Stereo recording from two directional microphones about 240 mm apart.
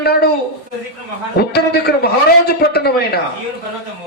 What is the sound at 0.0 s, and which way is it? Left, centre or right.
Speech, left.